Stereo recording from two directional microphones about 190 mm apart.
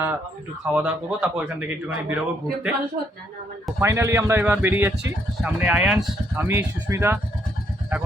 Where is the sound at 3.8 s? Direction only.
15° right (ahead or behind).